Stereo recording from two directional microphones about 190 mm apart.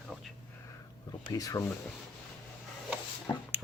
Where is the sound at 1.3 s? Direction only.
20° left (ahead or behind).